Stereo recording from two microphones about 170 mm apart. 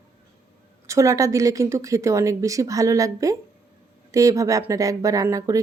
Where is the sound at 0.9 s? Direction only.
20° right (ahead or behind).